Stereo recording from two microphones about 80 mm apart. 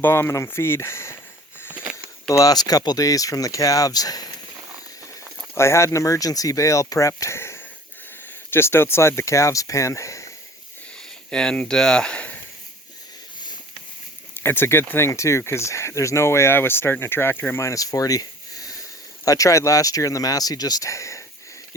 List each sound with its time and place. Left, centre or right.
0.0 s speech: left
1.7 s sniff: centre
2.3 s speech: left
5.5 s speech: left
11.3 s speech: centre
14.4 s speech: left